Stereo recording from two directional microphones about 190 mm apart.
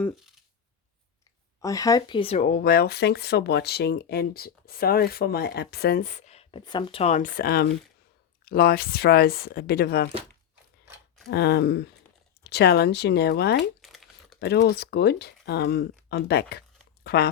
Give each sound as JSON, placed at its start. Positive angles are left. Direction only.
{"t": 1.6, "sound": "speech", "side_deg": 15}
{"t": 11.3, "sound": "speech", "side_deg": 60}
{"t": 13.6, "sound": "crumpling", "side_deg": 0}
{"t": 14.3, "sound": "speech", "side_deg": 60}